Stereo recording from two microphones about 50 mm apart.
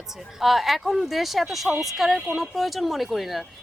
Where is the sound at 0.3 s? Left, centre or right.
Centre.